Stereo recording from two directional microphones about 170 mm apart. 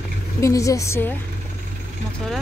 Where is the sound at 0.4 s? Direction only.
20° left (ahead or behind).